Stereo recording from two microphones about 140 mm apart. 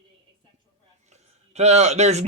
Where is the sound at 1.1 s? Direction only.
50° right (ahead or behind).